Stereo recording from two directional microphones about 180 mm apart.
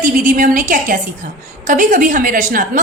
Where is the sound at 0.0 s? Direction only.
50° right (ahead or behind).